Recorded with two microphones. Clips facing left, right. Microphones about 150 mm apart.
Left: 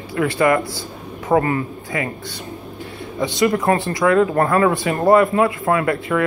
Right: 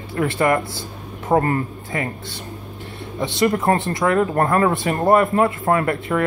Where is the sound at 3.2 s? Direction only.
30° right (ahead or behind).